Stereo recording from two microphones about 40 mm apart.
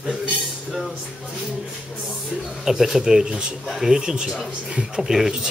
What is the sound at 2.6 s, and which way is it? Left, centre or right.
Speech, centre.